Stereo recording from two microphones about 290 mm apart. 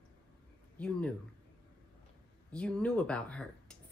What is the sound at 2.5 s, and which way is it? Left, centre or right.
Speech, centre.